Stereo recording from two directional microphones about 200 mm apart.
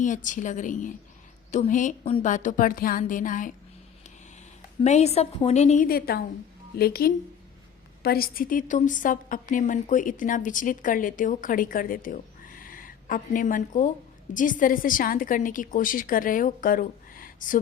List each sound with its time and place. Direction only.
0.0 s a woman's voice: 40° left (ahead or behind)
4.8 s a woman's voice: 35° left (ahead or behind)